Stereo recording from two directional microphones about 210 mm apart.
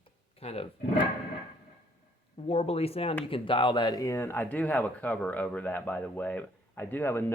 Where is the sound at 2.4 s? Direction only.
30° left (ahead or behind).